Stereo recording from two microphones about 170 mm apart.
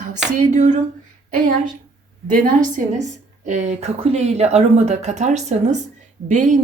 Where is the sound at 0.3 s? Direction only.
45° right (ahead or behind).